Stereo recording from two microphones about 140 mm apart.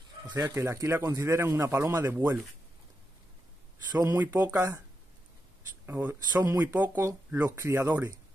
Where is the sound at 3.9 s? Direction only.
25° right (ahead or behind).